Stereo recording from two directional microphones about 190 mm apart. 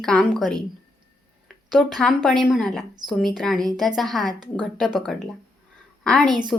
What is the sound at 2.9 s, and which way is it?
Speech, 20° right (ahead or behind).